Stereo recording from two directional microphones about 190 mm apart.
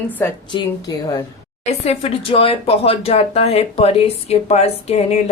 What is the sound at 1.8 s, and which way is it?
Speech, 35° left (ahead or behind).